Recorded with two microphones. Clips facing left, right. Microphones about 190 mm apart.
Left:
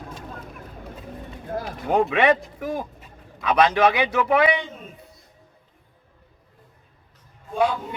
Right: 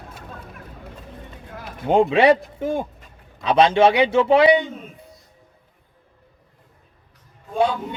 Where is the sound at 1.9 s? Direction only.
25° right (ahead or behind).